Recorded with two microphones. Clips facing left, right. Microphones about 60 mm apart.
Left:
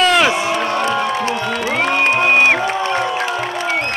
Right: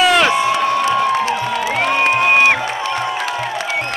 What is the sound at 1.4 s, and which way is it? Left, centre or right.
Music, left.